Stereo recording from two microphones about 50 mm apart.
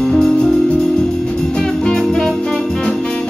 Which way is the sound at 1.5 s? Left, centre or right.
Centre.